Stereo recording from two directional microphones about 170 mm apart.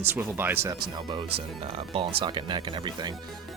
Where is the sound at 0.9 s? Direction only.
30° right (ahead or behind).